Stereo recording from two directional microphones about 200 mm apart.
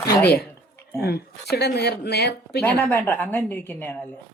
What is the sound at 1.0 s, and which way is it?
Speech, 55° left (ahead or behind).